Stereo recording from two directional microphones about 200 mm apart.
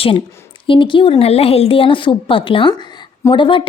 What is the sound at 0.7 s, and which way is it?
A woman's voice, 25° left (ahead or behind).